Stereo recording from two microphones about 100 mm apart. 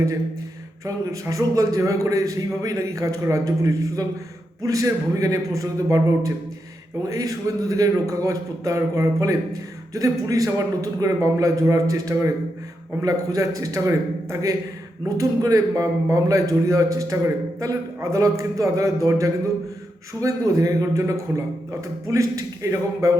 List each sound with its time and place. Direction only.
0.9 s a man's voice: 35° right (ahead or behind)